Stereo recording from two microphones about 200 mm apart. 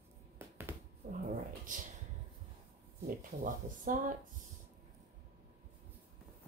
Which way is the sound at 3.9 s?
40° right (ahead or behind).